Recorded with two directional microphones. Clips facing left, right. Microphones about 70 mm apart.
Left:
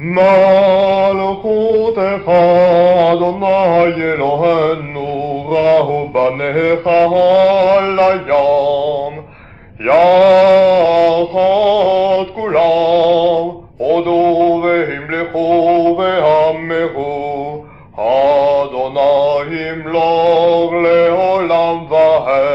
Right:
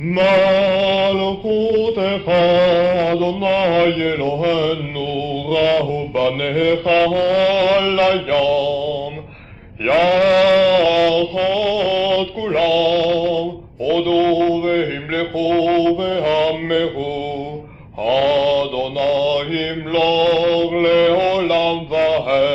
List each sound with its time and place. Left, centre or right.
0.3 s a sound: left
0.6 s mantra: left
2.8 s mantra: left
5.3 s mantra: left
5.8 s mantra: left
9.8 s mantra: left
10.1 s a sound: left
12.2 s male singing: left
13.4 s mantra: left
16.1 s mantra: left
16.3 s mantra: left
19.0 s mantra: left
19.9 s mantra: left